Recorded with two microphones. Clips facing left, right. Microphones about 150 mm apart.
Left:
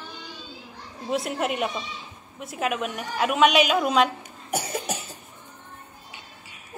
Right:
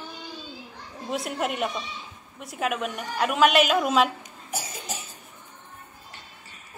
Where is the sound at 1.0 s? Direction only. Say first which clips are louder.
Left 2 dB; centre (ahead or behind).